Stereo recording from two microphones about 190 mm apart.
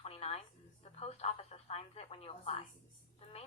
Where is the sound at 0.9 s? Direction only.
35° left (ahead or behind).